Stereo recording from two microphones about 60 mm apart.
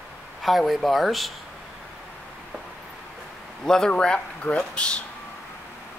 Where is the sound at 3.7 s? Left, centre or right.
Centre.